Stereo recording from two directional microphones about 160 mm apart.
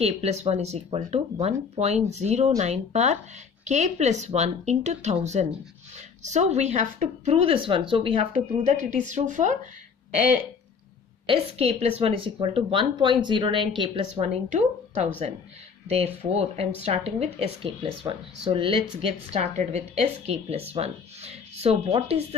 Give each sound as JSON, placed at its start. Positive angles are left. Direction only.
{"t": 0.0, "sound": "speech", "side_deg": -40}
{"t": 11.2, "sound": "speech", "side_deg": -35}